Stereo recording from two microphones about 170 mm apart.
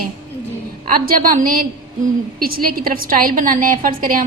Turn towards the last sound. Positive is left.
turn(degrees=-55)  # may be behind; listen again after turning